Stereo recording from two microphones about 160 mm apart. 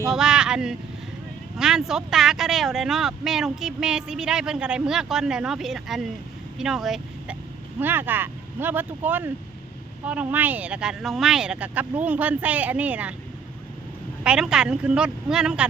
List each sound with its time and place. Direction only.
0.1 s speech: 5° right (ahead or behind)
6.6 s vehicle: 5° right (ahead or behind)
7.8 s speech: 10° right (ahead or behind)
14.3 s speech: 5° right (ahead or behind)